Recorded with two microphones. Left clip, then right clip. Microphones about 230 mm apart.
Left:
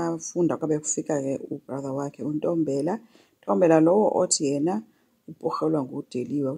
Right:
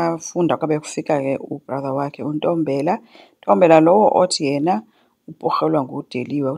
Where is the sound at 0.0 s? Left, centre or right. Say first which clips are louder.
Right 6 dB; right.